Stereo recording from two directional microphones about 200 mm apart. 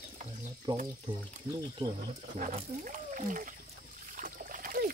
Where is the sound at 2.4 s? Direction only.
40° right (ahead or behind).